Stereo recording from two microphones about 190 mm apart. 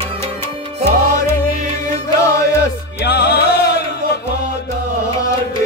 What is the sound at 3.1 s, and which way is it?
Music, 60° left (ahead or behind).